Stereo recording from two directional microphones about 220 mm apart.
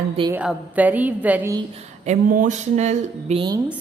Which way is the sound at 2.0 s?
35° right (ahead or behind).